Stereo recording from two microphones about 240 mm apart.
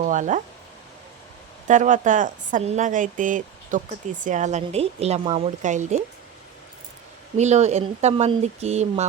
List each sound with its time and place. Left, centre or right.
0.0 s speech: right
1.6 s a woman's voice: right
7.3 s speech: right